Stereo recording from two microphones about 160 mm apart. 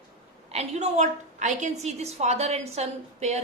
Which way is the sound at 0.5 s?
45° right (ahead or behind).